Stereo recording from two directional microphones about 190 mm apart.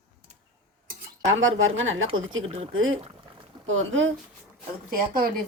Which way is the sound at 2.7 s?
90° right.